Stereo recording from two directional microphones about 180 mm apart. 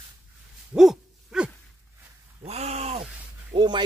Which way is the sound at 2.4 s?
35° right (ahead or behind).